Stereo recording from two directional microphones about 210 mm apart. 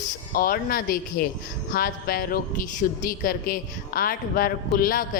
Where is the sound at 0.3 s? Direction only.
45° left (ahead or behind).